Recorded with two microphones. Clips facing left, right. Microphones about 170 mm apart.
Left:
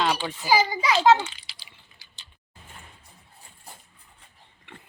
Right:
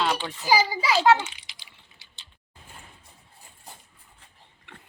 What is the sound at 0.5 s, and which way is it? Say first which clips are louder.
Speech: even; 10° right (ahead or behind).